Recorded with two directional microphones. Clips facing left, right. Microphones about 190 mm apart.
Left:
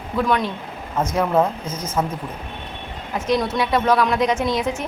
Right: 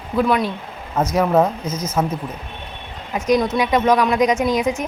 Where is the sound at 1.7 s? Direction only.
10° left (ahead or behind).